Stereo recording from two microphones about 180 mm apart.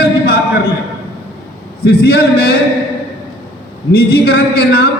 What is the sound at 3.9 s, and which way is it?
Speech, 60° left (ahead or behind).